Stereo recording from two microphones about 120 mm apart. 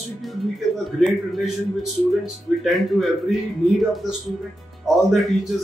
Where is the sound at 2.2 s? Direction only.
Centre (ahead or behind).